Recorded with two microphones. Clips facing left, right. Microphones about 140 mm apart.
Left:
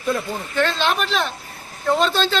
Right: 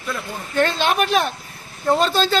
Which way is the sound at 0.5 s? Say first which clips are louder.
Right 2 dB; 50° right (ahead or behind).